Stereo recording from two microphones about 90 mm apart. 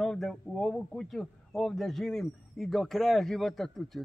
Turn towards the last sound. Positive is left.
turn(degrees=5)  # may be behind; listen again after turning